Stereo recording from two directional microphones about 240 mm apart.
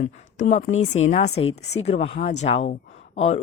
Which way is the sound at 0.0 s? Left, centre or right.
Left.